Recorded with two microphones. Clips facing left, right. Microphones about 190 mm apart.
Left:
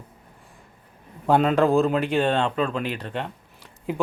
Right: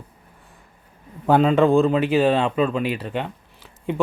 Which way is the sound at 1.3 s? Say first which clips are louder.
Right 3 dB; centre (ahead or behind).